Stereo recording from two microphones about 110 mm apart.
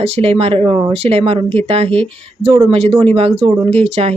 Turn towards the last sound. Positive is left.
turn(degrees=-70)  # may be behind; listen again after turning